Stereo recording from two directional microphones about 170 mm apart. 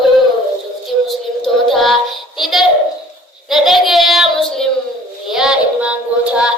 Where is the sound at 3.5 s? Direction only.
Centre (ahead or behind).